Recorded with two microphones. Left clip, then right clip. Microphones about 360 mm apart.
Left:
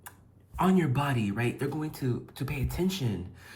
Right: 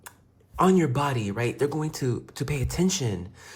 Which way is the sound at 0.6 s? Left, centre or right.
Centre.